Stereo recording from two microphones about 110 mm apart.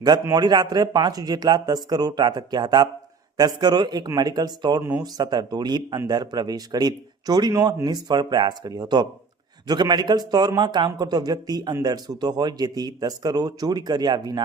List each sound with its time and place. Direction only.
0.3 s a man's voice: 40° right (ahead or behind)
4.8 s speech: 20° right (ahead or behind)
5.1 s a man's voice: 40° right (ahead or behind)